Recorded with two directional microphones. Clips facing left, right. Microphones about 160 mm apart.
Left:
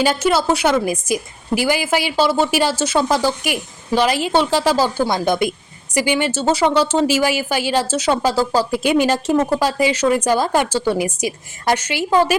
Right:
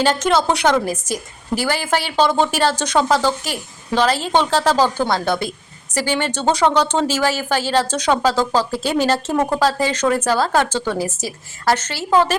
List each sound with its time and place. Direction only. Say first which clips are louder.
0.0 s speech: even; 10° left (ahead or behind)